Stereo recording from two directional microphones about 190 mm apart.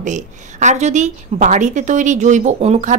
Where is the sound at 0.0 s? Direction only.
40° right (ahead or behind).